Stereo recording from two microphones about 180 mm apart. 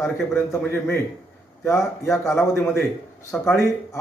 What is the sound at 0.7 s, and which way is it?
Speech, 10° left (ahead or behind).